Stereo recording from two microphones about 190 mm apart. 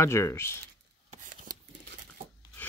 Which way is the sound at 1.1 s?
45° right (ahead or behind).